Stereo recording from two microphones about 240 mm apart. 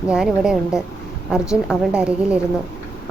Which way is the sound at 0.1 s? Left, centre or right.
Centre.